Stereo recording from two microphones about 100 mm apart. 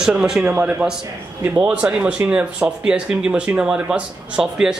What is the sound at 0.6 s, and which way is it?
Speech, 20° right (ahead or behind).